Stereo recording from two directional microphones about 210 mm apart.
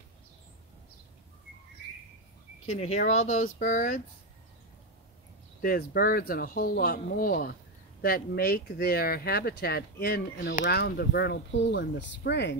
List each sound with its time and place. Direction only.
2.6 s speech: 30° left (ahead or behind)
5.6 s speech: 45° left (ahead or behind)